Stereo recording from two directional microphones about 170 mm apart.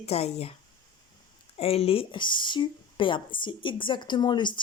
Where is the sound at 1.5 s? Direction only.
35° left (ahead or behind).